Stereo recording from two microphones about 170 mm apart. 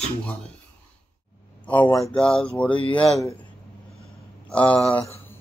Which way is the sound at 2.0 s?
5° left (ahead or behind).